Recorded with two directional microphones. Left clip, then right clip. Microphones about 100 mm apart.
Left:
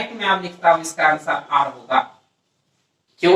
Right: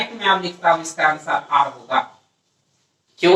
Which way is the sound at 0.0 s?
30° right (ahead or behind).